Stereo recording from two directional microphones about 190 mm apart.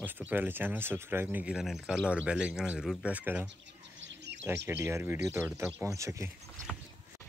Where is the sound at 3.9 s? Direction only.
70° right (ahead or behind).